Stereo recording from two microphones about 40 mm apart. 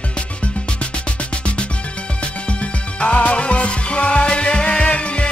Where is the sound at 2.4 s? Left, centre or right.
Left.